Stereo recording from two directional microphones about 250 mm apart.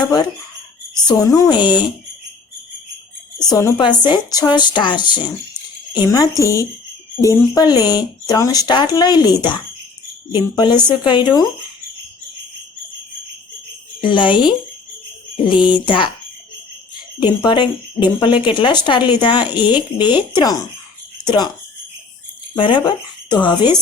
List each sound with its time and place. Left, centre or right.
0.0 s speech: centre
3.5 s speech: centre
14.0 s speech: centre
15.6 s speech: centre
17.2 s speech: centre
22.5 s speech: centre